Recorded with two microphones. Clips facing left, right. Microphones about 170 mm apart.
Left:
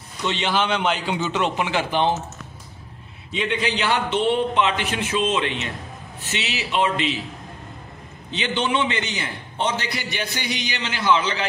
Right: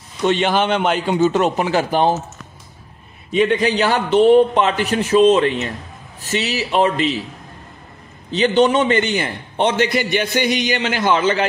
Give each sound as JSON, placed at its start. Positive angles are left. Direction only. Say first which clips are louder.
{"t": 0.2, "sound": "a man's voice", "louder": "right 7 dB", "side_deg": -50}
{"t": 3.3, "sound": "a man's voice", "louder": "right 8 dB", "side_deg": -45}
{"t": 8.3, "sound": "a man's voice", "louder": "right 9 dB", "side_deg": -40}